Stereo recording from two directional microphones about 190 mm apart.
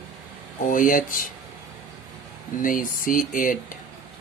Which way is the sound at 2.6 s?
45° left (ahead or behind).